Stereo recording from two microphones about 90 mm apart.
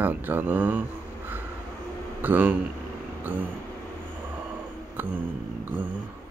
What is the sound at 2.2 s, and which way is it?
Speech, 20° right (ahead or behind).